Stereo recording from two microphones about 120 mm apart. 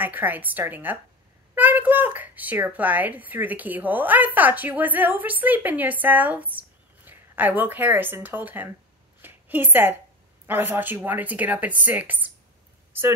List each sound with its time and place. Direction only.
0.0 s speech: 15° right (ahead or behind)
9.2 s a sound: 15° right (ahead or behind)
10.4 s speech: 15° right (ahead or behind)